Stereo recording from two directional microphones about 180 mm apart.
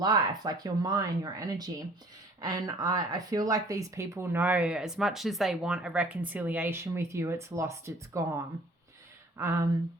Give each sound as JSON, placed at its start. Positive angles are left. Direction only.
{"t": 0.0, "sound": "speech", "side_deg": -20}